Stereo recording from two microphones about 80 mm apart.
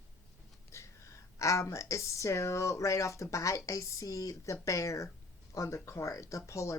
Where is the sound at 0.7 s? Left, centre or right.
Left.